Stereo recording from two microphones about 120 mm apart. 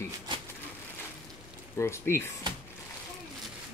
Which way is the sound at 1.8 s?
20° left (ahead or behind).